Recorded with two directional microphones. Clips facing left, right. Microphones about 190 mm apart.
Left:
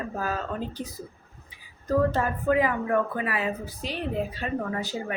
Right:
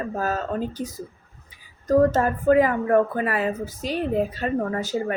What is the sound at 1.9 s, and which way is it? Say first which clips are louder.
A woman's voice: right 6 dB; 45° right (ahead or behind).